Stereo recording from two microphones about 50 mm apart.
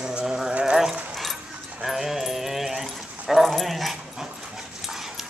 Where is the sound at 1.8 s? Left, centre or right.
Centre.